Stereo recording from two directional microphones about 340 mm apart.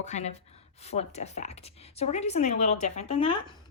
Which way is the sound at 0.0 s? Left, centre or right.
Centre.